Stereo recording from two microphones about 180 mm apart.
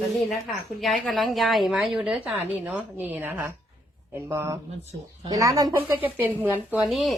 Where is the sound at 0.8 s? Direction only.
Centre (ahead or behind).